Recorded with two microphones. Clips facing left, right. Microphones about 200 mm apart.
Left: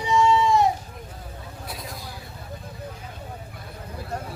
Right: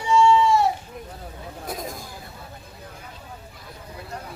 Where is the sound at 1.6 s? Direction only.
45° right (ahead or behind).